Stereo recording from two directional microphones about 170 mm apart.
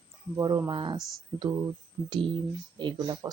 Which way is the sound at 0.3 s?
20° right (ahead or behind).